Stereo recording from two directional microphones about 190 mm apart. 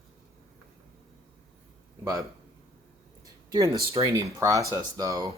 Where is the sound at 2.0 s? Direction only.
20° right (ahead or behind).